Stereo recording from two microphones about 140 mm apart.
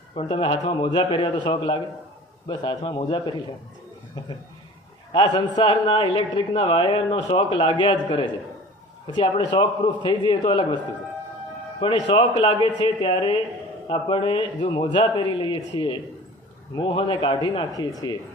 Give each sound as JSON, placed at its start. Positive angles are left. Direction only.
{"t": 0.1, "sound": "a man's voice", "side_deg": 40}
{"t": 5.1, "sound": "a man's voice", "side_deg": 35}
{"t": 11.8, "sound": "a man's voice", "side_deg": 35}